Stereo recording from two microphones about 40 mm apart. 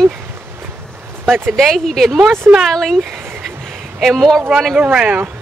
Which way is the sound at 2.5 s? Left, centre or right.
Right.